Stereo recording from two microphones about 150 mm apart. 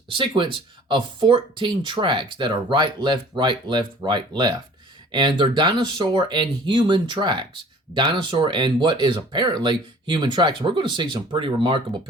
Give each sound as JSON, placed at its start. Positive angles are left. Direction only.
{"t": 0.1, "sound": "speech", "side_deg": -35}